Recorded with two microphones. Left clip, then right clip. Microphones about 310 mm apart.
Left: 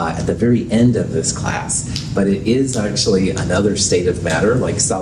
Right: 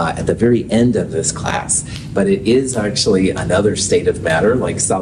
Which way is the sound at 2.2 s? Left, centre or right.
Right.